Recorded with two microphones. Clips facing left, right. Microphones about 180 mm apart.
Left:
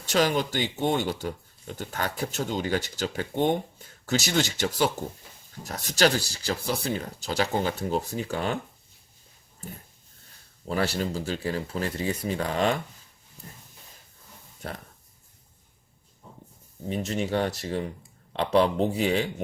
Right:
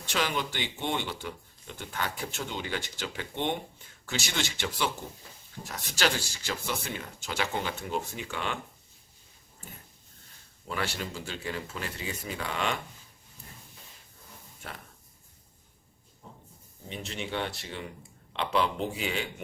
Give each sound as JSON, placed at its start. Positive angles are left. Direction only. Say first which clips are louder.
{"t": 0.0, "sound": "speech", "louder": "left 7 dB", "side_deg": 40}
{"t": 10.7, "sound": "speech", "louder": "left 7 dB", "side_deg": 35}
{"t": 16.9, "sound": "speech", "louder": "left 8 dB", "side_deg": 40}